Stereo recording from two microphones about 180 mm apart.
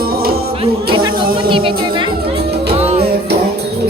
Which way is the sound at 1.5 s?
30° right (ahead or behind).